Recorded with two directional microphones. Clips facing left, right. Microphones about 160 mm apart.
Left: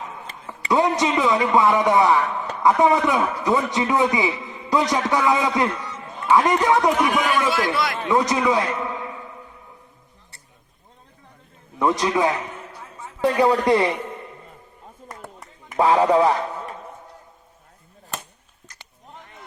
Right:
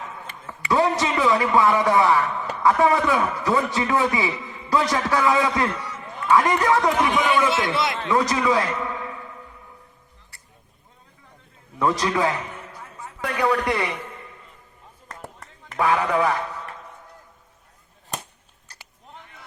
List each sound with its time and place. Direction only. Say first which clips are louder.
0.4 s a man's voice: left 1 dB; 20° left (ahead or behind)
7.1 s a man's voice: even; 5° left (ahead or behind)
7.7 s a man's voice: even; 25° right (ahead or behind)
7.9 s a man's voice: left 2 dB; 20° left (ahead or behind)
11.8 s a man's voice: left 2 dB; 20° left (ahead or behind)
12.7 s a sound: left 1 dB; 5° left (ahead or behind)
13.2 s a man's voice: left 5 dB; 30° left (ahead or behind)
15.0 s a sound: even; 10° left (ahead or behind)
15.8 s a man's voice: left 5 dB; 30° left (ahead or behind)